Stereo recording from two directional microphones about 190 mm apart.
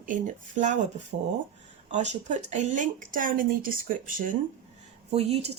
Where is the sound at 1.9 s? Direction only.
40° right (ahead or behind).